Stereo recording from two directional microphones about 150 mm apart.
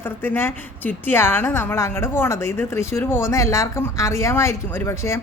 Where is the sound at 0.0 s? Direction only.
15° left (ahead or behind).